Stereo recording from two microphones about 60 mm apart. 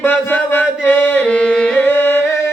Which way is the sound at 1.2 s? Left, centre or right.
Centre.